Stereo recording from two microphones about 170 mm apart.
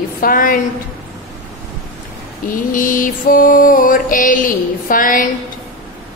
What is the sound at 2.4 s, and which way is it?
Mantra, 50° left (ahead or behind).